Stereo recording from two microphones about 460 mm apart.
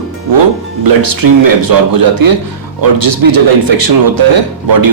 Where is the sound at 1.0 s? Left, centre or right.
Right.